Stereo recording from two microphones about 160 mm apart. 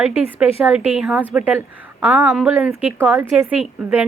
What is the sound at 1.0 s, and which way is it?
A woman's voice, centre (ahead or behind).